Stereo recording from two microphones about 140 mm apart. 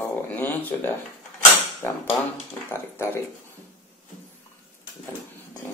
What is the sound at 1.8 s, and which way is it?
Speech, 15° left (ahead or behind).